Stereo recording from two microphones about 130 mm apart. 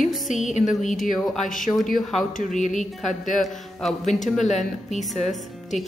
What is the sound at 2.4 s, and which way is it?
Speech, 75° left (ahead or behind).